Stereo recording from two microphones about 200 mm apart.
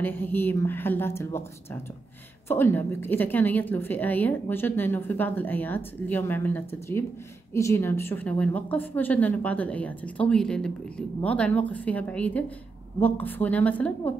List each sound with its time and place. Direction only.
0.0 s a woman's voice: 10° left (ahead or behind)